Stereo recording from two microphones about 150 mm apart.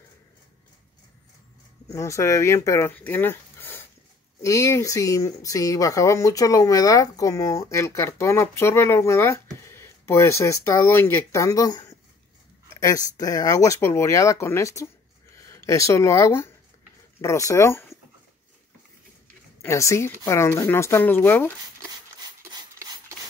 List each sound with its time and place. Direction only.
1.9 s speech: 20° left (ahead or behind)
19.6 s speech: 20° left (ahead or behind)
22.5 s rub: 25° right (ahead or behind)